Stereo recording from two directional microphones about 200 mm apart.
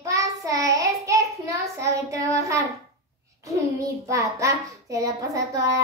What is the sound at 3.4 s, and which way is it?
A child's voice, 15° right (ahead or behind).